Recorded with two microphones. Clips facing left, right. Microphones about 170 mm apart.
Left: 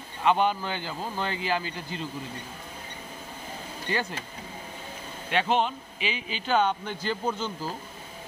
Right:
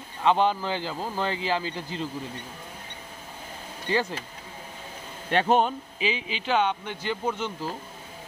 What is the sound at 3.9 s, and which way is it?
Speech, 25° right (ahead or behind).